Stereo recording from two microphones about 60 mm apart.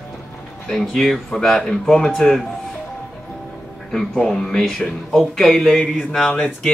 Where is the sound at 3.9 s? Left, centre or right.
Centre.